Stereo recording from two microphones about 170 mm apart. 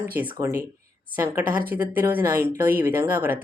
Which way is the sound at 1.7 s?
10° right (ahead or behind).